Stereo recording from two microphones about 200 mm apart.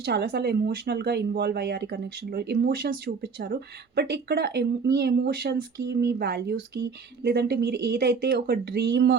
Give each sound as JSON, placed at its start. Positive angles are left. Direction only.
{"t": 0.0, "sound": "a woman's voice", "side_deg": -55}